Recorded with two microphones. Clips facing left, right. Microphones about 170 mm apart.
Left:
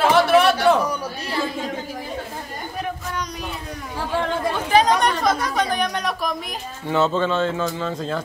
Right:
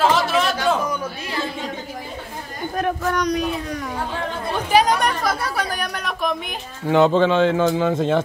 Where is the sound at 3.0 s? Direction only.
70° right (ahead or behind).